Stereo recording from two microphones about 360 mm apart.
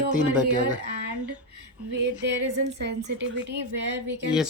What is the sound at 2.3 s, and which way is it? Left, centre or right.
Speech, right.